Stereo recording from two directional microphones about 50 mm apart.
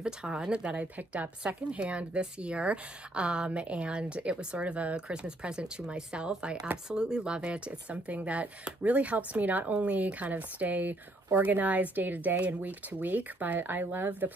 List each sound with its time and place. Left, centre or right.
0.0 s a woman's voice: centre; by 14.3 s right